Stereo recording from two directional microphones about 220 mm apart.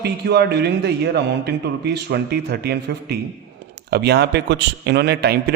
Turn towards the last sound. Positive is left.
turn(degrees=-45)  # may be behind; listen again after turning